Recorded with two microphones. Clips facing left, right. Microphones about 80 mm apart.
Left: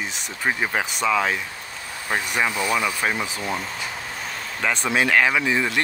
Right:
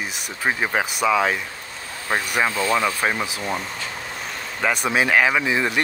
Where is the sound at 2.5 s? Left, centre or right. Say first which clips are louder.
Right 2 dB; centre.